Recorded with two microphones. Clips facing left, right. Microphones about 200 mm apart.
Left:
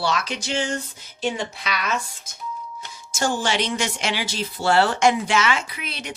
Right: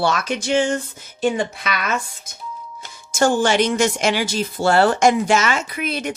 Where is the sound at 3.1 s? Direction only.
50° right (ahead or behind).